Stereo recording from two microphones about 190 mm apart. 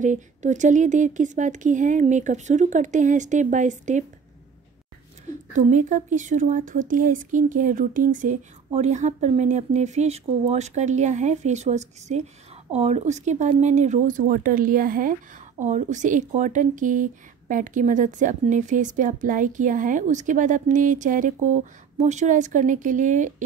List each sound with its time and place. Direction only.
0.0 s speech: 40° right (ahead or behind)
5.5 s speech: 40° right (ahead or behind)